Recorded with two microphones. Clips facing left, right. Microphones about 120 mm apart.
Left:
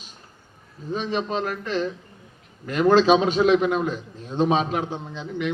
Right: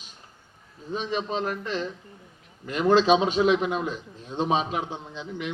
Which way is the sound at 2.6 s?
50° left (ahead or behind).